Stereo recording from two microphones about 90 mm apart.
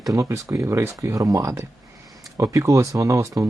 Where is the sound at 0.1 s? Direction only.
35° right (ahead or behind).